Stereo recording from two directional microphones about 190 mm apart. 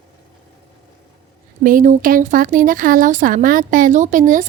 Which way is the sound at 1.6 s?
45° right (ahead or behind).